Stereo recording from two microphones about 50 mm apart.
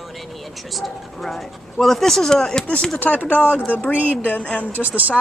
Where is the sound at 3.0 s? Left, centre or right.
Left.